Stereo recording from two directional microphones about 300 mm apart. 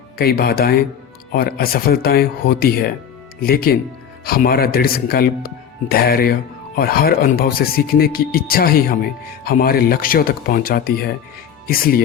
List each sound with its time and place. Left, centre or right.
0.2 s speech: left